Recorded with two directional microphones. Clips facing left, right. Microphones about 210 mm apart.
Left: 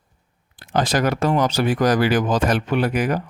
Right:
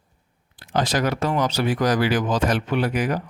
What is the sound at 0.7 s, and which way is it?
Speech, 50° left (ahead or behind).